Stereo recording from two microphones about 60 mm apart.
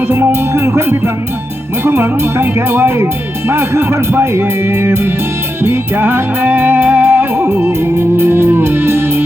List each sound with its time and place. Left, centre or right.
0.1 s speech: right
7.0 s music: right